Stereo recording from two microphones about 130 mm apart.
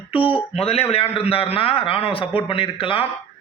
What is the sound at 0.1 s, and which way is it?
A man's voice, 45° left (ahead or behind).